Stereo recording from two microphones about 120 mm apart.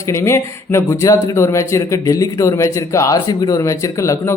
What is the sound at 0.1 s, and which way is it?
A man's voice, 20° left (ahead or behind).